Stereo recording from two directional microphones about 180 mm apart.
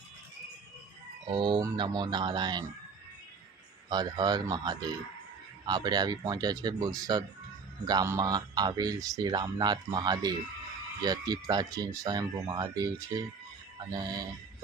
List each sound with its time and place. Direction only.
1.3 s a man's voice: 25° right (ahead or behind)
3.8 s a man's voice: 20° right (ahead or behind)